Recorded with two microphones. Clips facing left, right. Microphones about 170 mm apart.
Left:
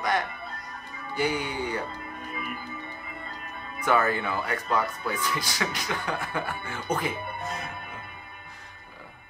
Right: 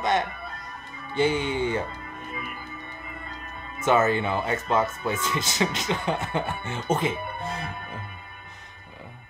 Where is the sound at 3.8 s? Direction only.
20° right (ahead or behind).